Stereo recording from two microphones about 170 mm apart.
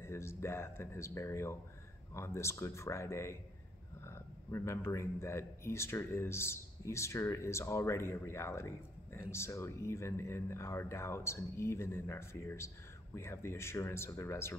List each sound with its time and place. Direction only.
0.0 s speech: 15° left (ahead or behind)